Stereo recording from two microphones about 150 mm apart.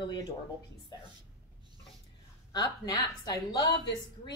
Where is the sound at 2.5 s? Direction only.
25° left (ahead or behind).